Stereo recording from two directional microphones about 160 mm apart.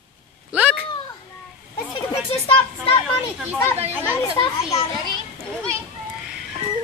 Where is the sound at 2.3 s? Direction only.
35° left (ahead or behind).